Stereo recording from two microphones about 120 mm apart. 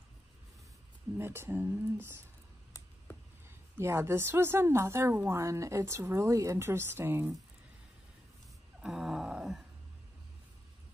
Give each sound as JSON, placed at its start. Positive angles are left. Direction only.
{"t": 1.1, "sound": "a woman's voice", "side_deg": -20}
{"t": 3.7, "sound": "a woman's voice", "side_deg": -20}
{"t": 8.8, "sound": "a sound", "side_deg": -5}